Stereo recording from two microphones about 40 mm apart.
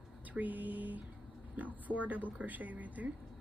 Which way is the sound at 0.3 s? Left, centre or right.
Right.